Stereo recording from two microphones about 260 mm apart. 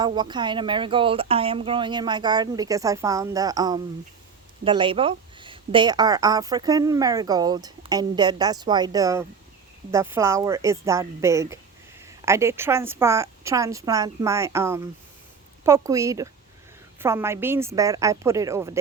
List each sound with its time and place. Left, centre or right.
0.0 s speech: centre